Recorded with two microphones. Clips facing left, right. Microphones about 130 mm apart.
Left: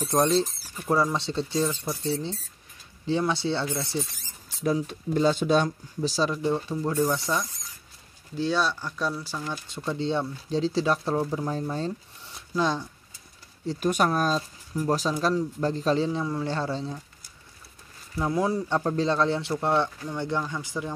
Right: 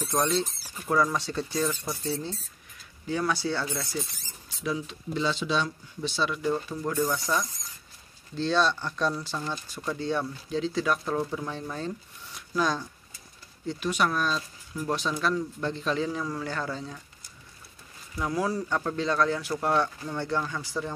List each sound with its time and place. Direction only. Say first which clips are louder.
0.0 s speech: left 4 dB; 35° left (ahead or behind)
4.6 s speech: left 5 dB; 45° left (ahead or behind)
5.9 s speech: left 3 dB; 35° left (ahead or behind)
6.4 s speech: left 2 dB; 25° left (ahead or behind)
8.4 s speech: right 1 dB; 10° left (ahead or behind)
9.7 s speech: left 4 dB; 25° left (ahead or behind)
12.4 s a sound: left 1 dB; 25° left (ahead or behind)
13.7 s speech: left 3 dB; 45° left (ahead or behind)
18.1 s speech: left 3 dB; 25° left (ahead or behind)